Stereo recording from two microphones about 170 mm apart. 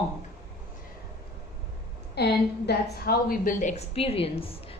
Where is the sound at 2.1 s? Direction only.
75° left (ahead or behind).